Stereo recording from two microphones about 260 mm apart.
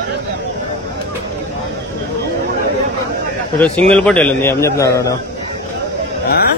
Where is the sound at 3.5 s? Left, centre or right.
Centre.